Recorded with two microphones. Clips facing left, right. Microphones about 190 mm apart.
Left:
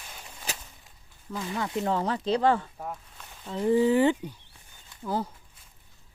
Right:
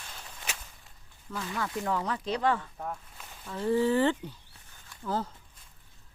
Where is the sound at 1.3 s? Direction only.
20° left (ahead or behind).